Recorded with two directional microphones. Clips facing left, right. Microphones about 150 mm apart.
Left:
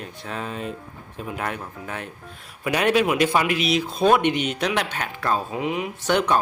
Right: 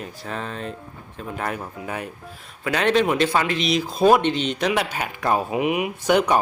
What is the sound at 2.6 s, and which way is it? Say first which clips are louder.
Speech: even; 10° left (ahead or behind).